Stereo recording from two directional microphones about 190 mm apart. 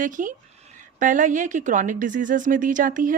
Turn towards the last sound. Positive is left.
turn(degrees=-45)  # may be behind; listen again after turning